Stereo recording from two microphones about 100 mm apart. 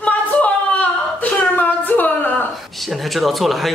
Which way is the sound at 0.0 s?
15° left (ahead or behind).